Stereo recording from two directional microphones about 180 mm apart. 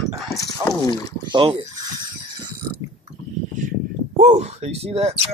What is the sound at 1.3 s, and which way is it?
Speech, 25° right (ahead or behind).